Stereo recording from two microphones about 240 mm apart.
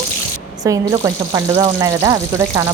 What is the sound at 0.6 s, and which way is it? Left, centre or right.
A woman's voice, centre.